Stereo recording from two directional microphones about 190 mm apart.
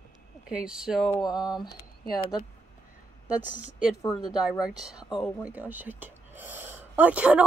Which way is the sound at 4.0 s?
20° left (ahead or behind).